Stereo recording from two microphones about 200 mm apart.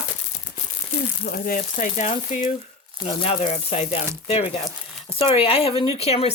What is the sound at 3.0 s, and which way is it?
Speech, 25° left (ahead or behind).